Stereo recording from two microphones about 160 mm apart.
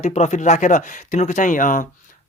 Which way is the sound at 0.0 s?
45° left (ahead or behind).